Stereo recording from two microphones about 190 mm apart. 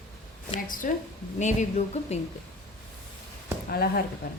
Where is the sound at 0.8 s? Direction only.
45° left (ahead or behind).